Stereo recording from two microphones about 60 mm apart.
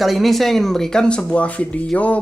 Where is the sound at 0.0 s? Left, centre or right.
Centre.